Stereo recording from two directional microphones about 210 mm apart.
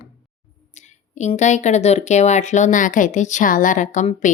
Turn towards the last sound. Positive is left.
turn(degrees=35)  # may be behind; listen again after turning